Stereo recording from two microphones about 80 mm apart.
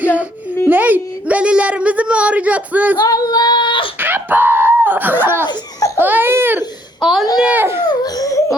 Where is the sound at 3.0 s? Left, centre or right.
Left.